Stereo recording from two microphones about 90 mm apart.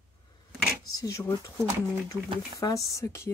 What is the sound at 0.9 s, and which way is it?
Speech, 35° left (ahead or behind).